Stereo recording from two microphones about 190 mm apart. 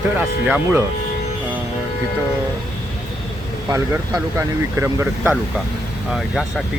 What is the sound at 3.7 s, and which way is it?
Speech, 15° right (ahead or behind).